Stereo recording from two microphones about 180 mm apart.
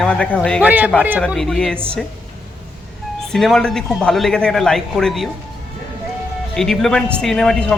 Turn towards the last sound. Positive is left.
turn(degrees=5)  # may be behind; listen again after turning